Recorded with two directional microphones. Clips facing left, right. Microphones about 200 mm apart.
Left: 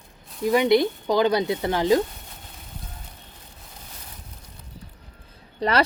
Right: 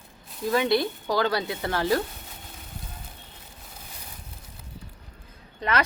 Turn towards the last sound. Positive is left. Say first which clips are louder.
# left 4 dB
turn(degrees=35)  # may be behind; listen again after turning